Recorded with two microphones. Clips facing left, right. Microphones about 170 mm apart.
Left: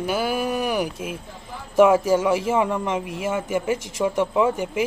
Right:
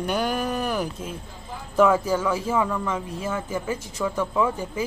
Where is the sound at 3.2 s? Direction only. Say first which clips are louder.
Left 4 dB; 10° left (ahead or behind).